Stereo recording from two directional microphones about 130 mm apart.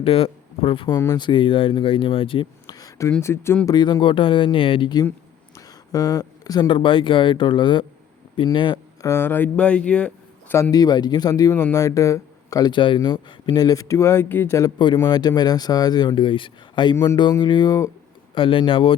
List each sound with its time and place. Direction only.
0.0 s speech: 45° left (ahead or behind)
0.9 s speech: 20° left (ahead or behind)
1.2 s speech: 40° left (ahead or behind); by 3.6 s 20° left (ahead or behind)
3.7 s speech: 30° left (ahead or behind)
9.0 s speech: 15° left (ahead or behind)
10.5 s speech: 25° left (ahead or behind)
14.9 s speech: 30° left (ahead or behind)
18.3 s speech: 40° left (ahead or behind)